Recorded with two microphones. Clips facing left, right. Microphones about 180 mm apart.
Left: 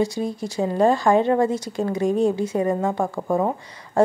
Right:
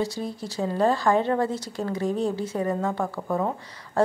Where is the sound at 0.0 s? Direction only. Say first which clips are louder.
Left 5 dB; 15° left (ahead or behind).